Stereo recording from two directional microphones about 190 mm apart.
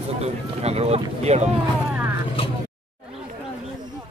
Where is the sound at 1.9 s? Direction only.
10° right (ahead or behind).